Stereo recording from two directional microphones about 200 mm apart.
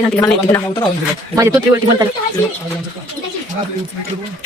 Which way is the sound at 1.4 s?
15° right (ahead or behind).